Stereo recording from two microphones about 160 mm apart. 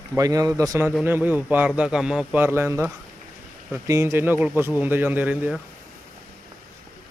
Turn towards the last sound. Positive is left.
turn(degrees=-10)  # may be behind; listen again after turning